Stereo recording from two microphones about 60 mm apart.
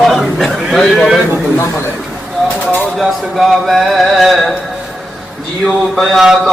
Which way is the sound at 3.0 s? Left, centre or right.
Centre.